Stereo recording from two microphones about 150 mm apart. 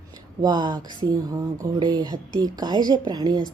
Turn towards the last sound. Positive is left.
turn(degrees=-25)  # may be behind; listen again after turning